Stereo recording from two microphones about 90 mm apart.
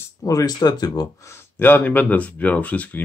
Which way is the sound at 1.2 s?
30° left (ahead or behind).